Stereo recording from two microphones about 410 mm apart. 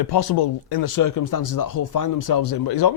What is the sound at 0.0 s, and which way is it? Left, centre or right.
Speech, left.